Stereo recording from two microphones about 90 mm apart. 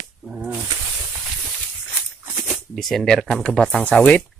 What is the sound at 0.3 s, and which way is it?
Snake, 15° right (ahead or behind).